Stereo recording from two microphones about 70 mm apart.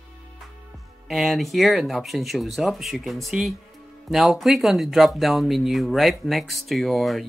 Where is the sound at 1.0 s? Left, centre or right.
Centre.